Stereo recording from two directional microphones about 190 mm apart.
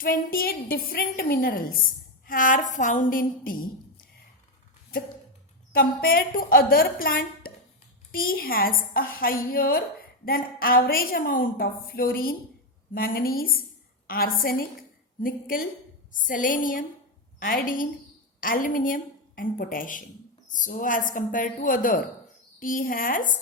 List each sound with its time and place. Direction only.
0.0 s a woman's voice: 50° left (ahead or behind)
5.7 s a woman's voice: 50° left (ahead or behind)